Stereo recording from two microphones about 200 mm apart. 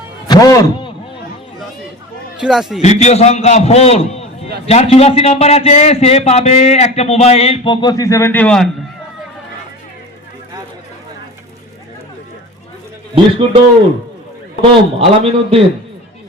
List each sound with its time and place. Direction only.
0.3 s a man's voice: 15° left (ahead or behind)
2.4 s a man's voice: centre (ahead or behind)
2.8 s a man's voice: 35° left (ahead or behind); by 8.7 s 5° left (ahead or behind)
14.6 s a man's voice: 25° right (ahead or behind)